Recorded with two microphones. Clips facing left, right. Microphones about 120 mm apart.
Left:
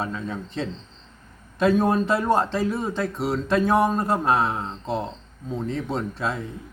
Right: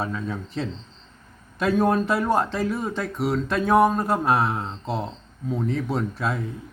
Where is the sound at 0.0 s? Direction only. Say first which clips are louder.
Right 1 dB; centre (ahead or behind).